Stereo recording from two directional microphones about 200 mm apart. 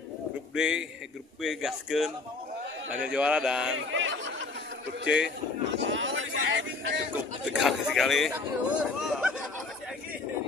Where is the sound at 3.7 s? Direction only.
75° right (ahead or behind).